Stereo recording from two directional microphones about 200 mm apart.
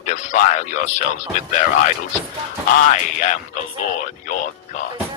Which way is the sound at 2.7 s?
40° left (ahead or behind).